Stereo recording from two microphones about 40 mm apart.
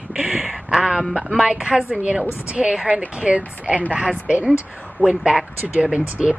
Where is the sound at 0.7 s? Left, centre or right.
Centre.